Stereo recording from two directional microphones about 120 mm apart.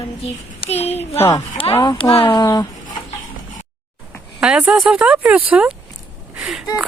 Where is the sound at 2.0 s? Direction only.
50° left (ahead or behind).